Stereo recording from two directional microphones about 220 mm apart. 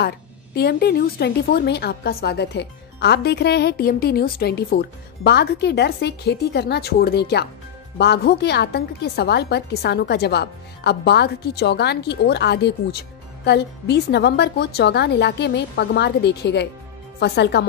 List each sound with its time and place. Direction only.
0.6 s a woman's voice: 45° left (ahead or behind)